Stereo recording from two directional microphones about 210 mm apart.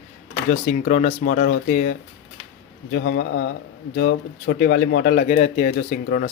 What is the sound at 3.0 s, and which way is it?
Speech, 50° left (ahead or behind).